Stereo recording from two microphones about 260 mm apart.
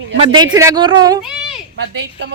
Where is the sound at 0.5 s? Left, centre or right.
Centre.